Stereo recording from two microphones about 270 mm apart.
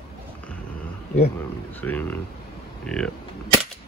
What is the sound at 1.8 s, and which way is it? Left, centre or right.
Speech, centre.